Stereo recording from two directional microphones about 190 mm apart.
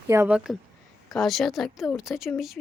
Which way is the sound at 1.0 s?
Centre (ahead or behind).